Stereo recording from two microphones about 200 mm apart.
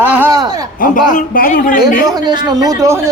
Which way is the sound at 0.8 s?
45° left (ahead or behind).